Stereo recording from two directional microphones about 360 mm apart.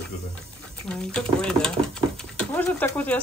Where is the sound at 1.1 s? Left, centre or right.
Centre.